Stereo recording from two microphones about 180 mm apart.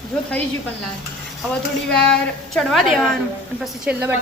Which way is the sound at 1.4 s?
5° left (ahead or behind).